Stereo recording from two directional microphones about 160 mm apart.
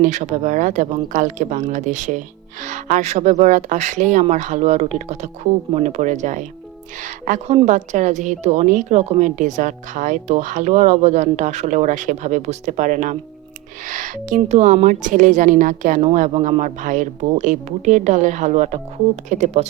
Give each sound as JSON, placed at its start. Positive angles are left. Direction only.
{"t": 0.0, "sound": "a woman's voice", "side_deg": -50}